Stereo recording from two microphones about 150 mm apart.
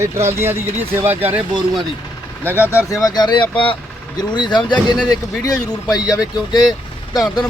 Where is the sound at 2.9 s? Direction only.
25° left (ahead or behind).